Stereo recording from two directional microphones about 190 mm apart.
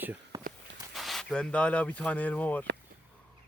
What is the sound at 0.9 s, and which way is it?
Speech, centre (ahead or behind).